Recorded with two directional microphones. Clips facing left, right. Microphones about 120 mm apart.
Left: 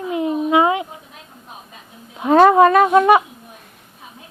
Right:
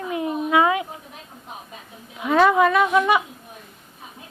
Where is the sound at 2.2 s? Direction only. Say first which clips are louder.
Left 6 dB; 40° left (ahead or behind).